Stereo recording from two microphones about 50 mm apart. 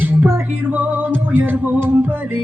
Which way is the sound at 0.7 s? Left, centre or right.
Right.